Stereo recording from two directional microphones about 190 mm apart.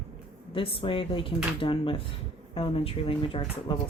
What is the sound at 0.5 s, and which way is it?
Speech, 30° left (ahead or behind).